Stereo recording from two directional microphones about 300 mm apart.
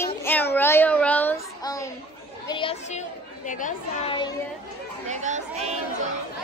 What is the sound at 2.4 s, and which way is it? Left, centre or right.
Chatter, centre.